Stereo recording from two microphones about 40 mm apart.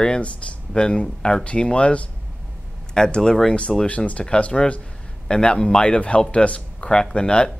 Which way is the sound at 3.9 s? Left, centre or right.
Left.